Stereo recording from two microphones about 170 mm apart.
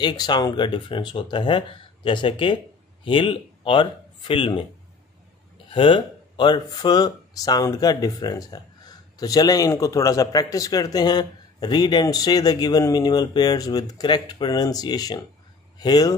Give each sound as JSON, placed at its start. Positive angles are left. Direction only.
{"t": 0.0, "sound": "speech", "side_deg": 25}
{"t": 5.7, "sound": "speech", "side_deg": 30}